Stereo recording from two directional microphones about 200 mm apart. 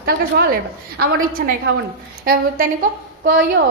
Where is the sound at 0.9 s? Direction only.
50° right (ahead or behind).